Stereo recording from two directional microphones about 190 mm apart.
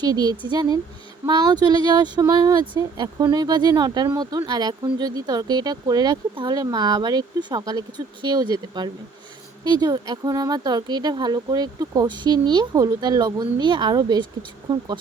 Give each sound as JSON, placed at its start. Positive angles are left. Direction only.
{"t": 0.0, "sound": "speech", "side_deg": -20}